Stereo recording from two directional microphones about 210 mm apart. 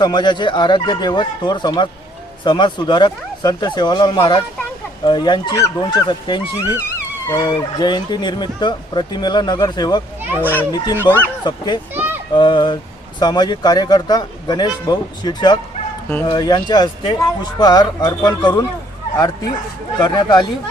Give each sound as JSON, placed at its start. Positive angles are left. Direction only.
{"t": 0.0, "sound": "speech", "side_deg": 20}
{"t": 10.4, "sound": "a child's voice", "side_deg": 10}
{"t": 10.9, "sound": "speech", "side_deg": -10}
{"t": 11.4, "sound": "speech", "side_deg": 20}
{"t": 11.9, "sound": "children playing", "side_deg": -10}
{"t": 12.3, "sound": "a child's voice", "side_deg": 20}